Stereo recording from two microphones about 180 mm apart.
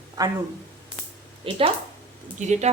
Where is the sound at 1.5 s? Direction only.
30° right (ahead or behind).